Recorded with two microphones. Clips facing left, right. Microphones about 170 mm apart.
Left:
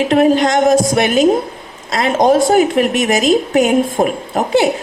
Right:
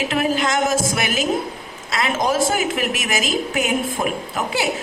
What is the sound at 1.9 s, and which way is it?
A woman's voice, 40° left (ahead or behind).